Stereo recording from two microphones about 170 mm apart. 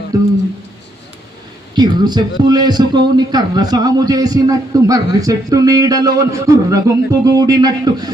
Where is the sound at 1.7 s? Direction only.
25° right (ahead or behind).